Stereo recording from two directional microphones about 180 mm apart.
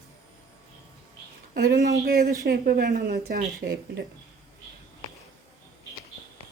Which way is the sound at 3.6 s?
60° right (ahead or behind).